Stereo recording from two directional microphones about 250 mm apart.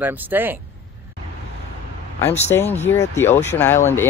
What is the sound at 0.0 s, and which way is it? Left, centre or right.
Speech, centre.